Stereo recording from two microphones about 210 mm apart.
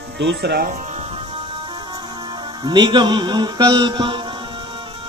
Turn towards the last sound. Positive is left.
turn(degrees=-20)  # may be behind; listen again after turning